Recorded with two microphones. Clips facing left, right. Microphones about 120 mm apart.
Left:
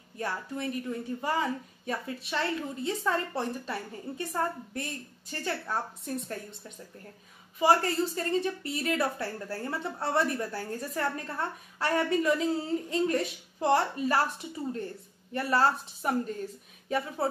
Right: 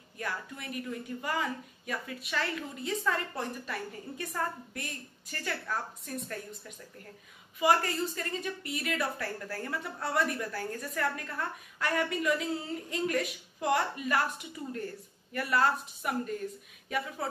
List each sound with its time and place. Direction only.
0.2 s a woman's voice: 30° left (ahead or behind)
7.5 s a woman's voice: 30° left (ahead or behind)